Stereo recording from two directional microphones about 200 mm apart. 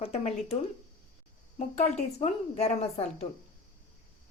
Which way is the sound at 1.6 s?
30° left (ahead or behind).